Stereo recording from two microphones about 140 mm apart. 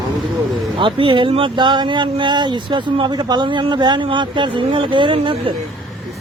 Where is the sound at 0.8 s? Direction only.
35° right (ahead or behind).